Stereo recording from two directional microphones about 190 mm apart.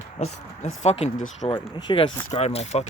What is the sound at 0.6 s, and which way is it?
Speech, 35° left (ahead or behind).